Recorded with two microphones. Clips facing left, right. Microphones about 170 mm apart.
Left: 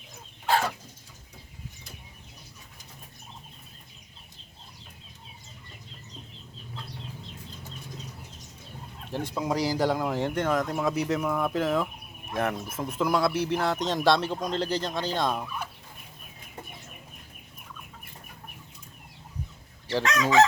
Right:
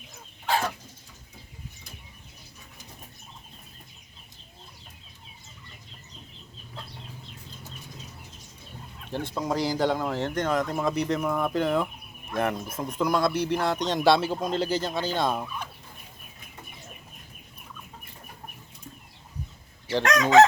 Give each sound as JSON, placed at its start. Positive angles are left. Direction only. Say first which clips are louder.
{"t": 9.1, "sound": "speech", "louder": "even", "side_deg": 5}
{"t": 20.0, "sound": "chicken", "louder": "right 3 dB", "side_deg": -60}